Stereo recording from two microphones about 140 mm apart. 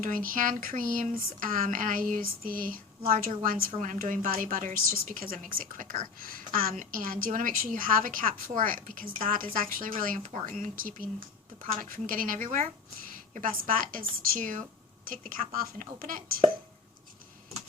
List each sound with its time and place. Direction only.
0.0 s a woman's voice: 75° right (ahead or behind)
15.0 s speech: 80° right
16.4 s speech: 45° right (ahead or behind)